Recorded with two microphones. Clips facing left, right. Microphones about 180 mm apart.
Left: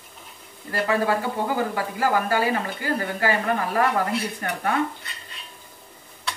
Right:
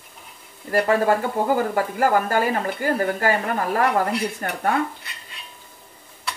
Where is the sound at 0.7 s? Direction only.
45° right (ahead or behind).